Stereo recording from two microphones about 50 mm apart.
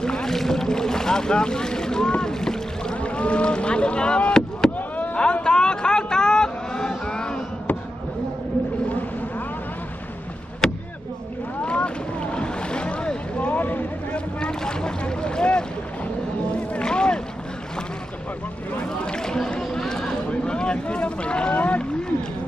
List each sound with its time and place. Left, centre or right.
0.0 s boat: centre
3.0 s speech: left
4.8 s a sound: left
5.1 s vehicle: centre
10.6 s a sound: centre
11.6 s boat: left
14.3 s boat: centre
16.7 s vehicle: centre
18.7 s a sound: centre
21.5 s boat: left